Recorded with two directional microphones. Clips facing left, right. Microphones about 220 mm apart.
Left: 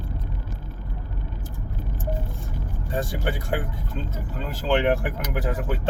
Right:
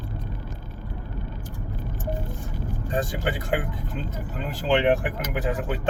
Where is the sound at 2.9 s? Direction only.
15° right (ahead or behind).